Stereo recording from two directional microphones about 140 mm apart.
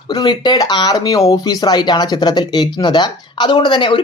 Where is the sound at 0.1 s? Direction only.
30° left (ahead or behind).